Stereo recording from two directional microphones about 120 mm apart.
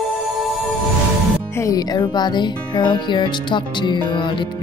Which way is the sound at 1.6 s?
30° left (ahead or behind).